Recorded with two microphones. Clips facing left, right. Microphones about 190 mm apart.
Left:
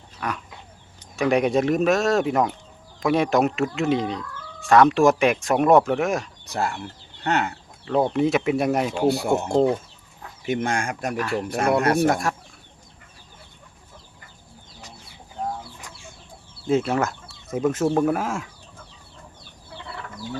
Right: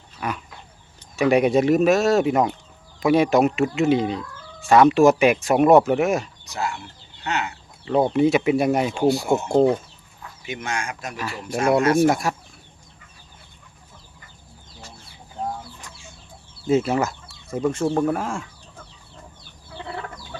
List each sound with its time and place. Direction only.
0.2 s chicken: 5° right (ahead or behind)
1.1 s speech: 5° right (ahead or behind)
6.4 s speech: 55° left (ahead or behind)
8.1 s speech: centre (ahead or behind)
9.0 s speech: 60° left (ahead or behind)
12.0 s speech: 5° right (ahead or behind)
16.6 s speech: centre (ahead or behind)